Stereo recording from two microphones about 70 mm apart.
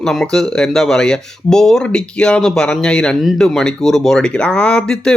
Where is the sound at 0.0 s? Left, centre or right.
Centre.